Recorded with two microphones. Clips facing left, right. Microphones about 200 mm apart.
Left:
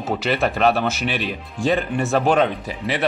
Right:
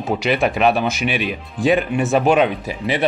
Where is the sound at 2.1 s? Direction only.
15° right (ahead or behind).